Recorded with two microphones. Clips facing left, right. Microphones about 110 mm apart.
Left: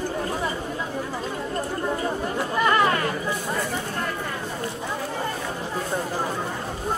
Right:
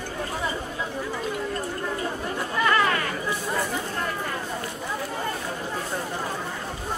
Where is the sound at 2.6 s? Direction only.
25° left (ahead or behind).